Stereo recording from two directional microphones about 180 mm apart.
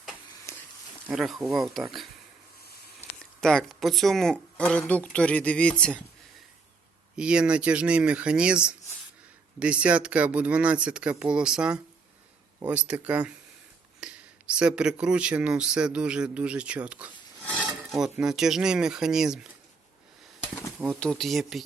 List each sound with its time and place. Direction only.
0.5 s pig: 15° left (ahead or behind)
1.0 s speech: centre (ahead or behind)
3.4 s speech: centre (ahead or behind)
7.2 s speech: 5° right (ahead or behind)
17.4 s filing: 5° left (ahead or behind)
17.9 s speech: 5° right (ahead or behind)
20.9 s speech: centre (ahead or behind)